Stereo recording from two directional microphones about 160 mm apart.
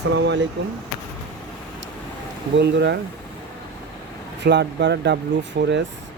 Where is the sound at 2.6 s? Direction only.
90° right.